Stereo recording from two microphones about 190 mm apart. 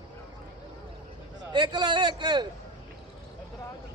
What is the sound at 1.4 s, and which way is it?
A man's voice, 25° right (ahead or behind).